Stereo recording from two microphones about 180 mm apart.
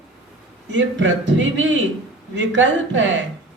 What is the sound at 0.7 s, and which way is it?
Speech, 90° right.